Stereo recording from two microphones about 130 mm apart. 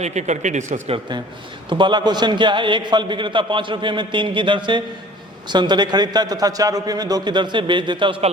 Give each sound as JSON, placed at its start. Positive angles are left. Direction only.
{"t": 0.0, "sound": "speech", "side_deg": -65}
{"t": 1.7, "sound": "a man's voice", "side_deg": -35}